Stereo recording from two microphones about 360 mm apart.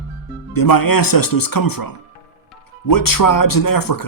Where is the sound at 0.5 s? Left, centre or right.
Left.